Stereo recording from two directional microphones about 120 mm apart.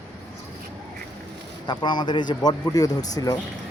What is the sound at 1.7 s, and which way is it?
A man's voice, 40° left (ahead or behind).